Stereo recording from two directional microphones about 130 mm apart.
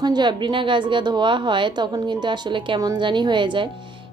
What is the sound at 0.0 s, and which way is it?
A woman's voice, 35° right (ahead or behind).